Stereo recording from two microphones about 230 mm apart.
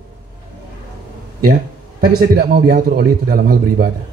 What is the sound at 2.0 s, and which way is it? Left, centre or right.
A man's voice, right.